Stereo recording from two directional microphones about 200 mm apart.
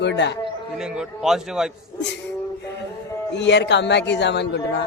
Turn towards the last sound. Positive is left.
turn(degrees=60)  # may be behind; listen again after turning